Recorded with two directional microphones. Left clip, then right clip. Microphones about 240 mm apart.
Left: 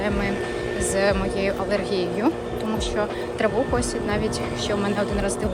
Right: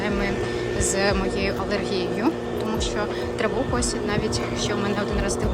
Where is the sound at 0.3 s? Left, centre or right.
Left.